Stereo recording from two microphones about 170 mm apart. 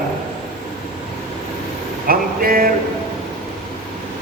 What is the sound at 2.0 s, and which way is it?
Speech, 60° right (ahead or behind).